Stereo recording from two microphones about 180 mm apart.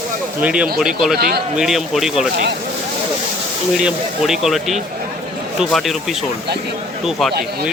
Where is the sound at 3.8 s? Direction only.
5° right (ahead or behind).